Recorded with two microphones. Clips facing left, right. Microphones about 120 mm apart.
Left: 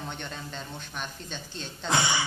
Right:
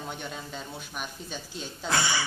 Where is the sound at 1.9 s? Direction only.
20° left (ahead or behind).